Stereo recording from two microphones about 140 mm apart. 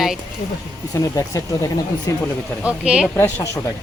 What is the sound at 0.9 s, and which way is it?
Speech, 25° left (ahead or behind).